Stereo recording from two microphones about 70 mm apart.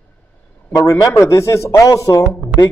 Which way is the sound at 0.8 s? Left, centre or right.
Left.